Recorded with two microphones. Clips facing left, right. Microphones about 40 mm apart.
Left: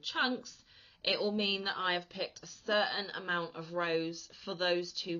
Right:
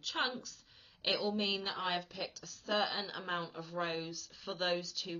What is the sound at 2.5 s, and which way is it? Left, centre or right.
A woman's voice, centre.